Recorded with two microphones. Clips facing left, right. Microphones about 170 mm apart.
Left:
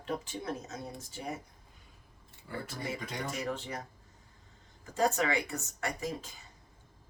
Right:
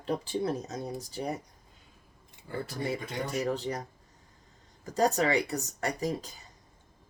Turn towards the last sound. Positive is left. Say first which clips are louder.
# right 5 dB
turn(degrees=-40)  # may be behind; listen again after turning